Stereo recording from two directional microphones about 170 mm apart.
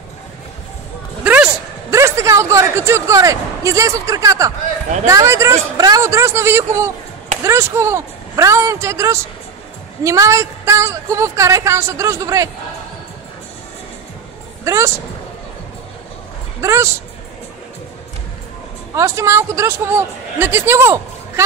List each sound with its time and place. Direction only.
1.2 s a woman's voice: 10° right (ahead or behind)
14.6 s speech: 20° right (ahead or behind)
16.6 s a woman's voice: 15° right (ahead or behind)
18.9 s a woman's voice: 15° right (ahead or behind)